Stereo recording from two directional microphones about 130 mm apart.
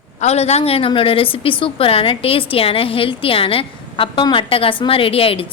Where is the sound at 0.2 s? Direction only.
55° left (ahead or behind).